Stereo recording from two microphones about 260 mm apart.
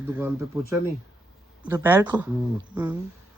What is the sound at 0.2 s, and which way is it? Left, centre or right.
Speech, centre.